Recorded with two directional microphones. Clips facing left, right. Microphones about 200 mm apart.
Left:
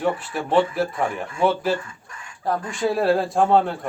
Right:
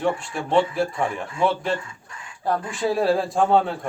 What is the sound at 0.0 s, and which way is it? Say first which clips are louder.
Speech: left 1 dB; 5° left (ahead or behind).